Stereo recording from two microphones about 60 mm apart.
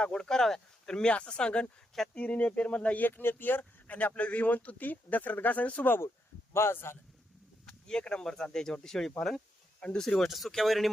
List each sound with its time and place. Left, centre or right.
0.0 s speech: centre
3.0 s speech: left
6.5 s speech: left
7.6 s speech: centre